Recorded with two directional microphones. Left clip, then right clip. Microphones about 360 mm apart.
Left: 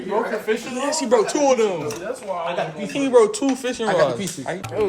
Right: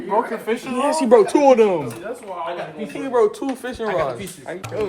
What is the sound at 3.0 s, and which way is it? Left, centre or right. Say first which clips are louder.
Speech: left 3 dB; centre.